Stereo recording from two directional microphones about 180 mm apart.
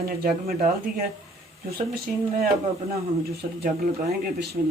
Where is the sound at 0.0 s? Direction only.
55° right (ahead or behind).